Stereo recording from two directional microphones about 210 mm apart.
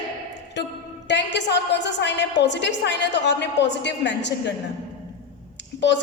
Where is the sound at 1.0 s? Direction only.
55° left (ahead or behind).